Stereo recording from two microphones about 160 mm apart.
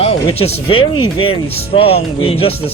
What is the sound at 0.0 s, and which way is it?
Speech, 40° left (ahead or behind).